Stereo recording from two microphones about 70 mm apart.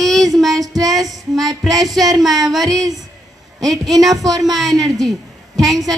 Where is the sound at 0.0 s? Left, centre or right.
Centre.